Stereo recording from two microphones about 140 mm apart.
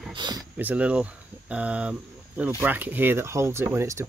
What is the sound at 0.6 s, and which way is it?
Speech, 10° right (ahead or behind).